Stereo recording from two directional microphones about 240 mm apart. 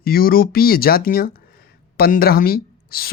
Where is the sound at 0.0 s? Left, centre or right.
Left.